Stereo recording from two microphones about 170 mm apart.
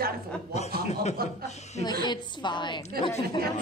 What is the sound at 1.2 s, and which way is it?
Speech, 60° right (ahead or behind).